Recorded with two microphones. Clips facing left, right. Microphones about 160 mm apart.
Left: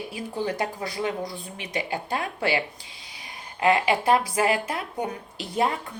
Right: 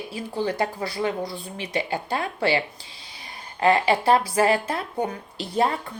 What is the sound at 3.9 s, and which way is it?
A woman's voice, 15° left (ahead or behind).